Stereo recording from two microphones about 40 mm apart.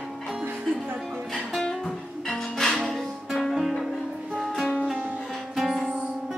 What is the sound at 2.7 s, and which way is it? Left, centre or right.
Music, centre.